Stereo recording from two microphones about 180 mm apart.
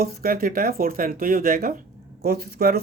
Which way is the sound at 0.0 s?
55° right (ahead or behind).